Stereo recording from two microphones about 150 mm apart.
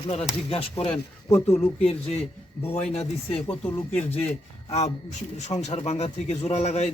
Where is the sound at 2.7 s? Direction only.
45° left (ahead or behind).